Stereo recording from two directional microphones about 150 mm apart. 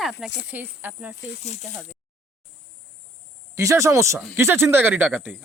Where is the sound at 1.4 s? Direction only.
50° left (ahead or behind).